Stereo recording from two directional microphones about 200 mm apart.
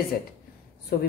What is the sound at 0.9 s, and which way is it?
Speech, 50° left (ahead or behind).